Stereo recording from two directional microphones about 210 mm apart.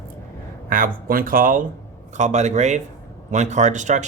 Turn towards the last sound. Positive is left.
turn(degrees=-35)  # may be behind; listen again after turning